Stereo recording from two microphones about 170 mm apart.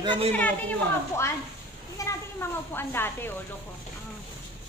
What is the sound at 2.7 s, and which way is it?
Speech, 15° left (ahead or behind).